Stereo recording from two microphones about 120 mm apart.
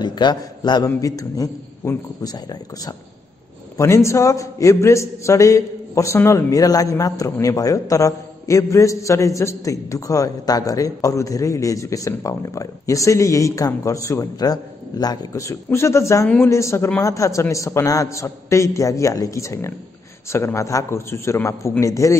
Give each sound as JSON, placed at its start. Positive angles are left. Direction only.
{"t": 0.0, "sound": "a man's voice", "side_deg": 35}